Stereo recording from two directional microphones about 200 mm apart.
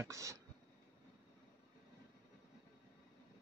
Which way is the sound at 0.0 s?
15° right (ahead or behind).